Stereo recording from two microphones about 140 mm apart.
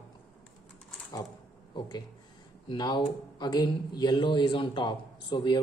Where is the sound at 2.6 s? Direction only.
30° left (ahead or behind).